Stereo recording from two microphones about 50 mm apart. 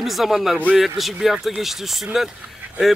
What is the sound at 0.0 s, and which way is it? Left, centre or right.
Speech, centre.